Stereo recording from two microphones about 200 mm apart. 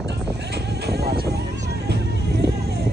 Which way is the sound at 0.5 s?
55° right (ahead or behind).